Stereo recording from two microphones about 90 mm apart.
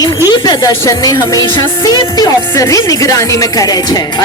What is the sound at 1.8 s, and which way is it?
Speech, 45° left (ahead or behind).